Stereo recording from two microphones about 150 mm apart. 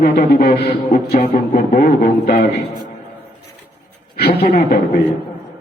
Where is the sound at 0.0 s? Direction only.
70° left (ahead or behind).